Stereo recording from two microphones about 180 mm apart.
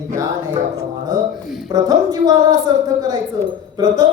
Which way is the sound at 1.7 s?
20° right (ahead or behind).